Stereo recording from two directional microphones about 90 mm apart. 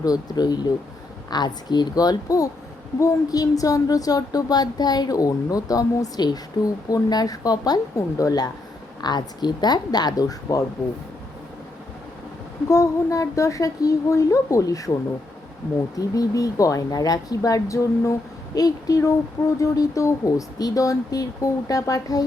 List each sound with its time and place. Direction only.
0.0 s speech: 45° left (ahead or behind)
9.0 s speech: 50° left (ahead or behind)
12.6 s speech: 35° left (ahead or behind)
16.0 s speech: 40° left (ahead or behind)